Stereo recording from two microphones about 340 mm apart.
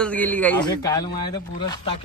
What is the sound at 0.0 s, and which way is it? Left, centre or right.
A man's voice, centre.